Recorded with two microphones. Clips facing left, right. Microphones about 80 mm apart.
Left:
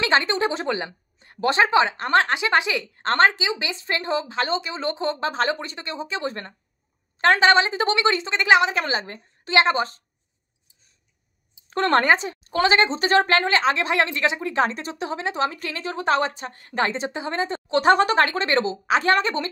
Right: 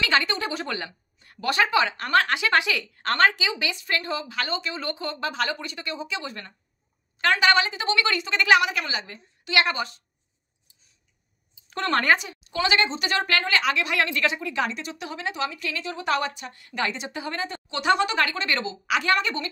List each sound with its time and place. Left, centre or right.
0.0 s a woman's voice: left
8.8 s a woman's voice: left
9.5 s a woman's voice: left
11.7 s a woman's voice: left
12.0 s a woman's voice: left
12.3 s speech: left
17.6 s speech: left